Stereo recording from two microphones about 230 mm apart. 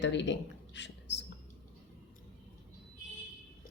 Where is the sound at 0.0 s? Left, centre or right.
Left.